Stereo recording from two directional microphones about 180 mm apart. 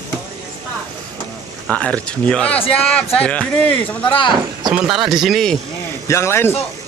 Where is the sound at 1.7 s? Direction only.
5° left (ahead or behind).